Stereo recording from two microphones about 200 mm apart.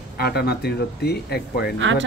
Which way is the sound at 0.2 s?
55° left (ahead or behind).